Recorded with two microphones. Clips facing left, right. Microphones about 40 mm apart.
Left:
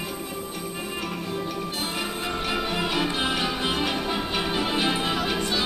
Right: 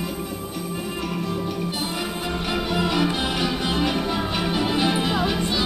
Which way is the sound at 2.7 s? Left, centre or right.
Centre.